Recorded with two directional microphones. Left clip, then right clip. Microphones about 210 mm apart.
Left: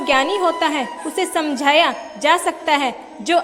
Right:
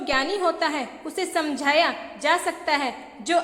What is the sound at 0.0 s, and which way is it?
A woman's voice, 20° left (ahead or behind).